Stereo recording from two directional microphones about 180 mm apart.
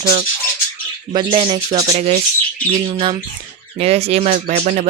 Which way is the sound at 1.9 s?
35° right (ahead or behind).